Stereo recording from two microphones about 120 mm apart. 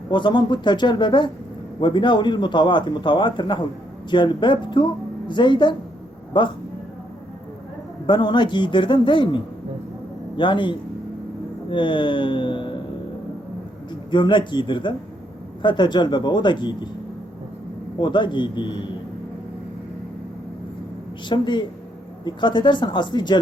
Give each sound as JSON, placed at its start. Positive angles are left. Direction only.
{"t": 0.1, "sound": "a man's voice", "side_deg": 40}
{"t": 8.0, "sound": "a man's voice", "side_deg": 40}
{"t": 14.1, "sound": "a man's voice", "side_deg": 40}
{"t": 18.0, "sound": "a man's voice", "side_deg": 40}
{"t": 21.2, "sound": "a man's voice", "side_deg": 40}